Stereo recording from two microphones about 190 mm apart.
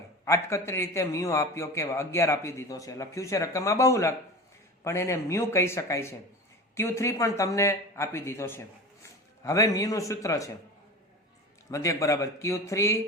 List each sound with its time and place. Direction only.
0.3 s a man's voice: 15° left (ahead or behind)
11.7 s a man's voice: 15° left (ahead or behind)